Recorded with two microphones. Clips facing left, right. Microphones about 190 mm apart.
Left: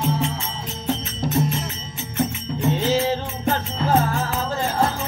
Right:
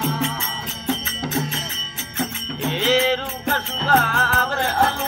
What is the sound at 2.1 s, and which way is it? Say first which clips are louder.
Music: left 3 dB; 85° right.